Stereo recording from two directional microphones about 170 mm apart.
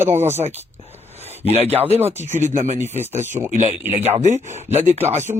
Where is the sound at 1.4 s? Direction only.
35° right (ahead or behind).